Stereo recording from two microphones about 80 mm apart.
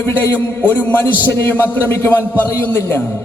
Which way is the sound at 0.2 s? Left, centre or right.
Left.